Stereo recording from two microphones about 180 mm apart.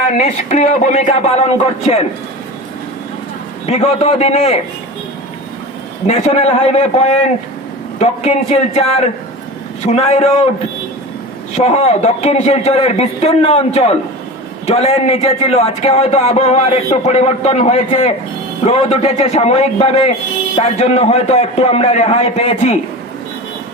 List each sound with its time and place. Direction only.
0.1 s speech: 40° left (ahead or behind)
3.7 s speech: 35° left (ahead or behind)
6.1 s speech: 40° left (ahead or behind)
7.9 s speech: 35° left (ahead or behind)
11.5 s speech: 35° left (ahead or behind)